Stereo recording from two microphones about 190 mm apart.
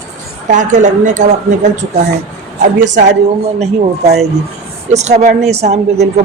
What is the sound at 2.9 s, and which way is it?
Speech, 40° right (ahead or behind).